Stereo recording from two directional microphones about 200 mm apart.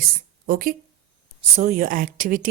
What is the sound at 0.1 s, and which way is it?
A woman's voice, 45° right (ahead or behind).